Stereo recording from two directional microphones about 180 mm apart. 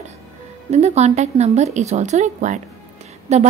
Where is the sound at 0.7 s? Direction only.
40° right (ahead or behind).